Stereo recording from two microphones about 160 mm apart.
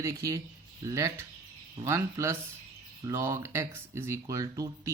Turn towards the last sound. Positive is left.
turn(degrees=-20)  # may be behind; listen again after turning